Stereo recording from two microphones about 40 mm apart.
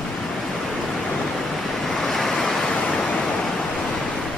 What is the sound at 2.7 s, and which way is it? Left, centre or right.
Waves, centre.